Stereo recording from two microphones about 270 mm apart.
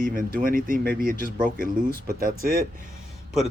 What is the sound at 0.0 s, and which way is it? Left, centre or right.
Speech, right.